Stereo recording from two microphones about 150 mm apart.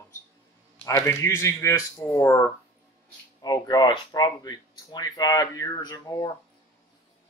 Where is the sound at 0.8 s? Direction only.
20° left (ahead or behind).